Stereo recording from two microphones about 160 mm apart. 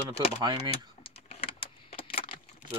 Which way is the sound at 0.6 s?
40° left (ahead or behind).